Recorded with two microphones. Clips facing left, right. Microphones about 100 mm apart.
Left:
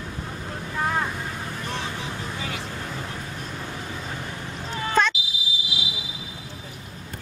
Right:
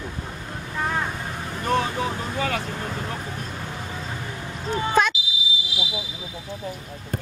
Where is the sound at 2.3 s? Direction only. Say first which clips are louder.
Right 7 dB; 55° right (ahead or behind).